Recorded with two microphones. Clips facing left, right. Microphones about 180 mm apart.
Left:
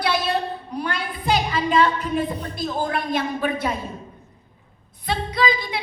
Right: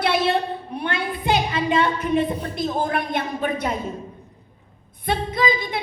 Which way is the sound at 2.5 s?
20° right (ahead or behind).